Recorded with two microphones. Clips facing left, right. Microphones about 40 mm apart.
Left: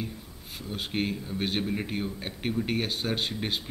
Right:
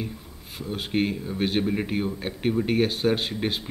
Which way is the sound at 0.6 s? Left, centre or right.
Centre.